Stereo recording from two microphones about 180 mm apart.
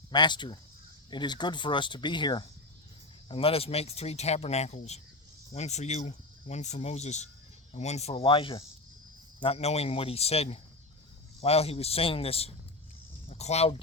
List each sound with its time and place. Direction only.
0.1 s speech: 25° left (ahead or behind)